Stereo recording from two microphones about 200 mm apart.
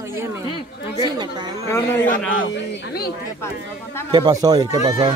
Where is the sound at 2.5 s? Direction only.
50° left (ahead or behind).